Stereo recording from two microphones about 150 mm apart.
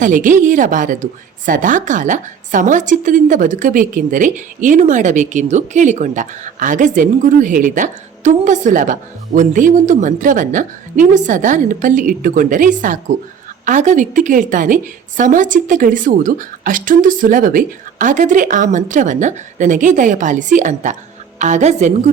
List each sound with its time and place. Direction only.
0.0 s a woman's voice: 60° right (ahead or behind)